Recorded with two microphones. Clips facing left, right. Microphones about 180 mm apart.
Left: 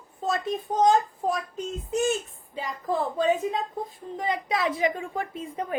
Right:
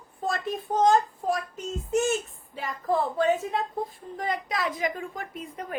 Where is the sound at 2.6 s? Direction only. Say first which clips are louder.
Right 2 dB; 15° left (ahead or behind).